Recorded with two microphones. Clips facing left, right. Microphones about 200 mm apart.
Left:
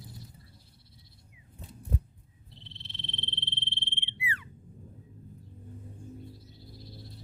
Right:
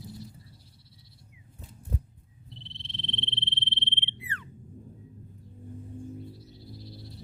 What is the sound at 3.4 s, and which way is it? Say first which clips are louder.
Frog: right 4 dB; 25° right (ahead or behind).